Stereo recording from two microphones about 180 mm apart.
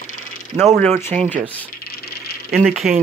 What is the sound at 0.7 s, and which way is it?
Speech, 15° left (ahead or behind).